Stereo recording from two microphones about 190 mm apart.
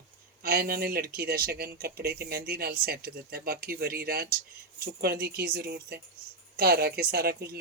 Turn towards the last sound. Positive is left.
turn(degrees=-55)  # may be behind; listen again after turning